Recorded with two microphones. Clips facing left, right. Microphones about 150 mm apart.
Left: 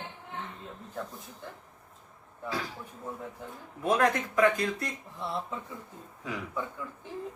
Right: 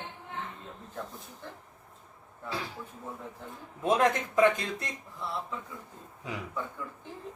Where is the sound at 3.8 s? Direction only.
20° right (ahead or behind).